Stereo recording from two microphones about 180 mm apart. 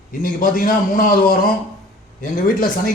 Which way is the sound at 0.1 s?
50° left (ahead or behind).